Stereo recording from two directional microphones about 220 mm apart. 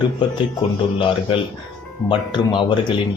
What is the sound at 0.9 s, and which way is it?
Speech, 25° left (ahead or behind).